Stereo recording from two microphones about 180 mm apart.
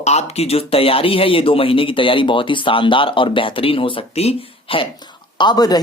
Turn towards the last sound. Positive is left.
turn(degrees=20)  # may be behind; listen again after turning